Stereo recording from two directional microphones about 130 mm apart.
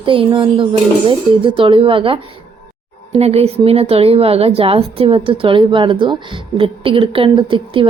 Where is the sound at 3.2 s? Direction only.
55° right (ahead or behind).